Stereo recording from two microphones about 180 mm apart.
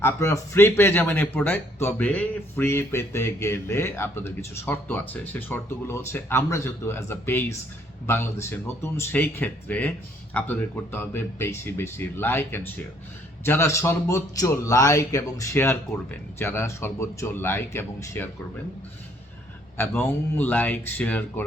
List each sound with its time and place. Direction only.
0.0 s speech: 15° left (ahead or behind)
19.7 s speech: 10° left (ahead or behind)